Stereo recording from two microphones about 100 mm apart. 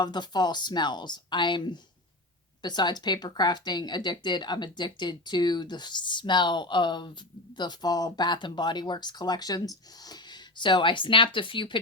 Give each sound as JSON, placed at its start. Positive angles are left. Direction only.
{"t": 0.0, "sound": "speech", "side_deg": 45}